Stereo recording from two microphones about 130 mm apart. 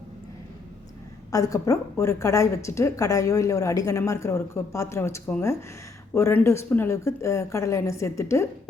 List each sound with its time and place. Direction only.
1.3 s speech: 25° left (ahead or behind)